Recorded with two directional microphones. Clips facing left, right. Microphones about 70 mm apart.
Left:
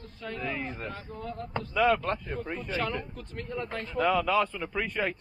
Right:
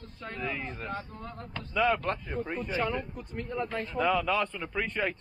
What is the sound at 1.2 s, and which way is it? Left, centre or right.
Speech, right.